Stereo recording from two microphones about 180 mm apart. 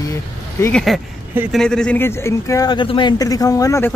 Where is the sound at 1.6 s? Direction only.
5° left (ahead or behind).